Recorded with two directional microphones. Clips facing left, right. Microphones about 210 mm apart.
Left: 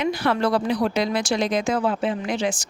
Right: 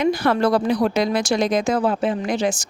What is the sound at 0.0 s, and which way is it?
Speech, 45° right (ahead or behind).